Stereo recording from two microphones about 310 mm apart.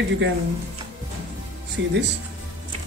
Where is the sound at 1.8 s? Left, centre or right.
Right.